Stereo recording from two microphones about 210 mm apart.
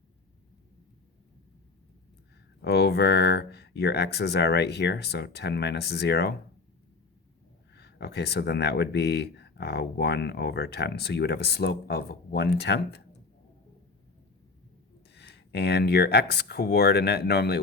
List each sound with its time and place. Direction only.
2.6 s speech: 50° left (ahead or behind)
7.7 s speech: 50° left (ahead or behind)
15.1 s speech: 55° left (ahead or behind)